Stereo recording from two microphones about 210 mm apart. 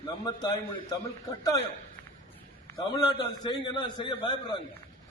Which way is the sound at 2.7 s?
20° left (ahead or behind).